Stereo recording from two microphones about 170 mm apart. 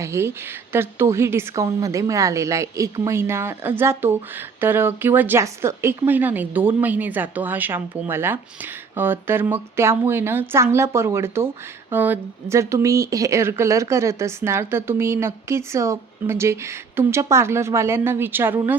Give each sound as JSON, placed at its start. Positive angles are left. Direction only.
{"t": 0.0, "sound": "a woman's voice", "side_deg": -15}